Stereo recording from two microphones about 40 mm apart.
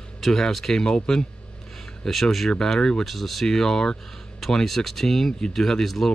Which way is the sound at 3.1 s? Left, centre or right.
Centre.